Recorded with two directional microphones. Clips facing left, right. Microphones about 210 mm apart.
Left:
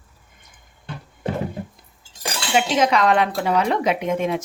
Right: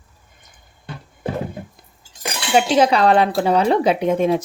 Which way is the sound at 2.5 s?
35° right (ahead or behind).